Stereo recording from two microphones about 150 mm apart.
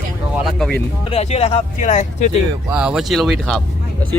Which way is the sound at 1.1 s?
45° left (ahead or behind).